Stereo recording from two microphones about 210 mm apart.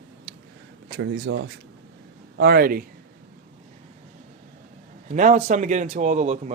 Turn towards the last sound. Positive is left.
turn(degrees=-35)  # may be behind; listen again after turning